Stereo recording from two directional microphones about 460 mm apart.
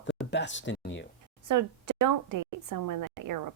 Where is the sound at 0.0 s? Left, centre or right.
Left.